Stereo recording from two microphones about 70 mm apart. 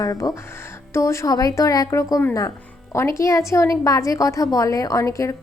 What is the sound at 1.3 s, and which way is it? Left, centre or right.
Speech, left.